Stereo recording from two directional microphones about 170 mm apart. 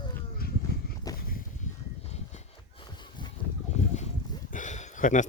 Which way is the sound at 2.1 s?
40° left (ahead or behind).